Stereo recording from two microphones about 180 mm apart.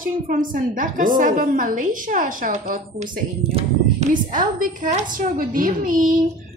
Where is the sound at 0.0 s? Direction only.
50° right (ahead or behind).